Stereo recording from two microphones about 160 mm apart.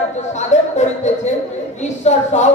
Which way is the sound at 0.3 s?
45° left (ahead or behind).